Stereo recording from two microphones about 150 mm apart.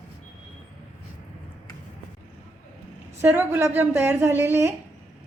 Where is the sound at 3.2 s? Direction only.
15° right (ahead or behind).